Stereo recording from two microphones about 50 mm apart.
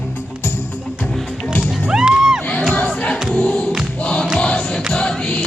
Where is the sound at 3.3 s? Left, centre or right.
Centre.